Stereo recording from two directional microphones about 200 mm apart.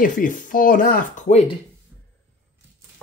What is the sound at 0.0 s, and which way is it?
Speech, 45° left (ahead or behind).